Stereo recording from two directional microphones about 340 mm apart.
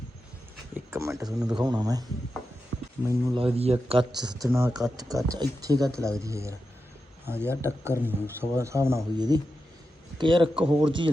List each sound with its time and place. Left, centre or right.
0.7 s speech: centre
3.1 s speech: centre
4.4 s speech: centre